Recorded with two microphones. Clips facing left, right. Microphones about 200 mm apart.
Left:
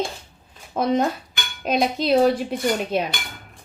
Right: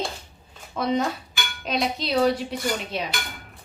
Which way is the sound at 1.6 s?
50° left (ahead or behind).